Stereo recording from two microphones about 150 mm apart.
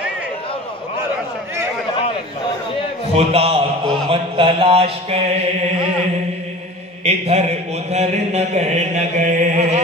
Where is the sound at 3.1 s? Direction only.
40° right (ahead or behind).